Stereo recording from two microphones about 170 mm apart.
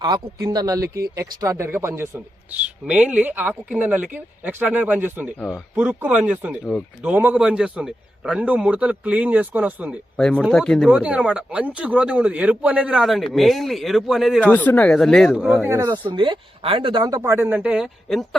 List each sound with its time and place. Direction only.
0.0 s speech: 20° right (ahead or behind)
10.2 s speech: 5° left (ahead or behind)
14.4 s speech: 10° left (ahead or behind)
15.7 s speech: 15° right (ahead or behind)
16.1 s speech: 30° right (ahead or behind); by 18.3 s centre (ahead or behind)